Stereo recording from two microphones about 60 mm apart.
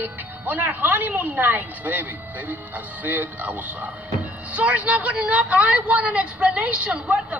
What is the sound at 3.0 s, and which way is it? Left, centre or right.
Speech, right.